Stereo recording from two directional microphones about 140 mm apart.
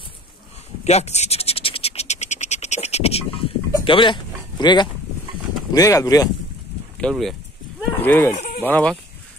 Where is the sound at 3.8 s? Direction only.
35° left (ahead or behind).